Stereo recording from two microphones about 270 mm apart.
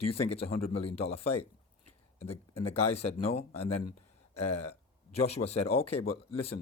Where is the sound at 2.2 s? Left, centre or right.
Left.